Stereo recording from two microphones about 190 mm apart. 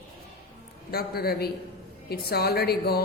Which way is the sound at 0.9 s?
55° left (ahead or behind).